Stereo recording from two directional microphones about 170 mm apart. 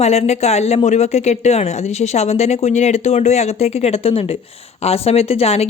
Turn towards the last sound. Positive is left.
turn(degrees=40)  # may be behind; listen again after turning